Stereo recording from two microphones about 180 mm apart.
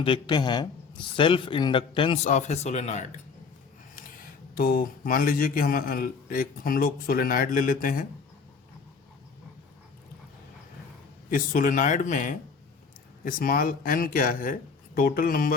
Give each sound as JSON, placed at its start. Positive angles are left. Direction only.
{"t": 0.0, "sound": "a man's voice", "side_deg": 25}
{"t": 2.2, "sound": "speech", "side_deg": 40}
{"t": 4.5, "sound": "a man's voice", "side_deg": 55}
{"t": 11.3, "sound": "a man's voice", "side_deg": 50}